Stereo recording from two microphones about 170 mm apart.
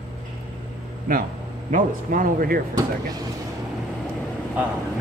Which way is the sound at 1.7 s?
55° right (ahead or behind).